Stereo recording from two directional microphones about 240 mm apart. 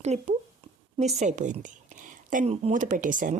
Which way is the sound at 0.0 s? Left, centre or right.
Right.